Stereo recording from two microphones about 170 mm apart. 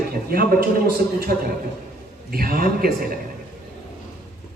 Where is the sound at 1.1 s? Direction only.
60° right (ahead or behind).